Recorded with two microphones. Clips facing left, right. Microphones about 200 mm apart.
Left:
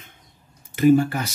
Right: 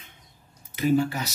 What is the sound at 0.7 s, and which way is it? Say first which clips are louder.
Speech: left 6 dB; 50° left (ahead or behind).